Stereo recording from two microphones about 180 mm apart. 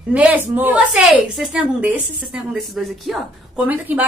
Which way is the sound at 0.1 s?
10° right (ahead or behind).